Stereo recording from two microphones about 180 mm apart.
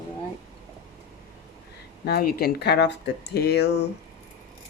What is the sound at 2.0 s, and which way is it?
Speech, 60° left (ahead or behind).